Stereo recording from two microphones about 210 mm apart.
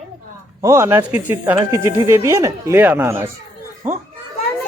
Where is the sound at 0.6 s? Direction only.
15° right (ahead or behind).